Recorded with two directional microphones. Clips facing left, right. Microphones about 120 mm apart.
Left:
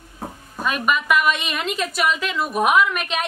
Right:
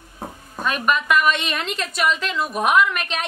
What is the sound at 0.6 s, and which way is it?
A woman's voice, 5° left (ahead or behind).